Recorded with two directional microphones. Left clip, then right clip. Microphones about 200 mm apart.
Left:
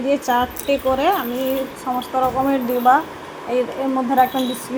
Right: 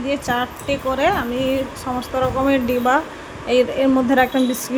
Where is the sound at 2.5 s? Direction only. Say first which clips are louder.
Left 2 dB; 25° right (ahead or behind).